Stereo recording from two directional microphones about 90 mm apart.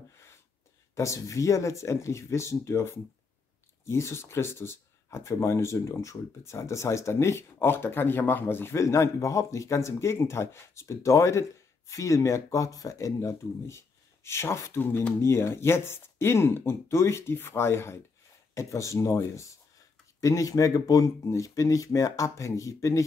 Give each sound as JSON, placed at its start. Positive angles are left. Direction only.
{"t": 0.9, "sound": "speech", "side_deg": 35}